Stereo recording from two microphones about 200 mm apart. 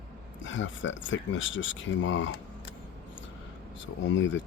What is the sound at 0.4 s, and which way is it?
Speech, 70° left (ahead or behind).